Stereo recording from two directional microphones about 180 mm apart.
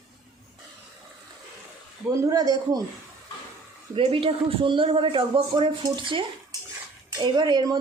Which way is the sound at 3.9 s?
30° right (ahead or behind).